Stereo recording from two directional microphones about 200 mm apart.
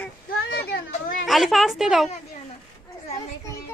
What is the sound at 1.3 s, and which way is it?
Speech, centre (ahead or behind).